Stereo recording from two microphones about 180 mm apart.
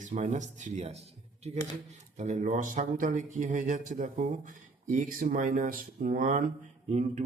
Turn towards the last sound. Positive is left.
turn(degrees=-40)  # may be behind; listen again after turning